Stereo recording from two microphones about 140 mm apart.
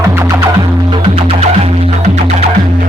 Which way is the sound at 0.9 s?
40° right (ahead or behind).